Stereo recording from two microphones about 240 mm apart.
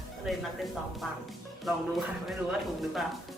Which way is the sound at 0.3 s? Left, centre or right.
Centre.